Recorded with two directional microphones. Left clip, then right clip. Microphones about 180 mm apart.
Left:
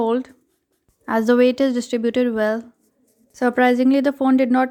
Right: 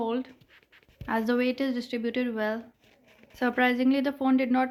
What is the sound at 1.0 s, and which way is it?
A woman's voice, 50° left (ahead or behind).